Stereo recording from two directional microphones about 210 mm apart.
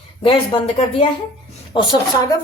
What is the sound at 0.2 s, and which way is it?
Speech, 25° left (ahead or behind).